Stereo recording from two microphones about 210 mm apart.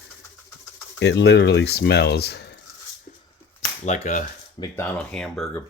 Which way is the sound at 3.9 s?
35° left (ahead or behind).